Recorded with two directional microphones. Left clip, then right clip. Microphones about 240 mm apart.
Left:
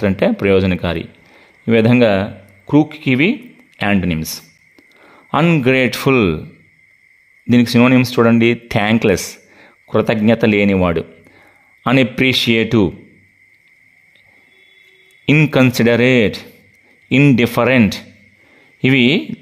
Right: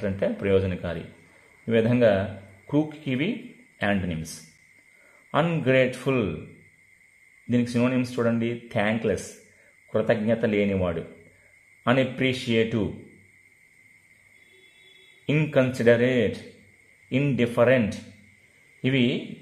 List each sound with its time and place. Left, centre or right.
0.0 s speech: left
5.3 s speech: left
7.4 s speech: left
15.2 s speech: left